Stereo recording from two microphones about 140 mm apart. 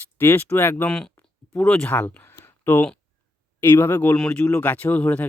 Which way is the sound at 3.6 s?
15° left (ahead or behind).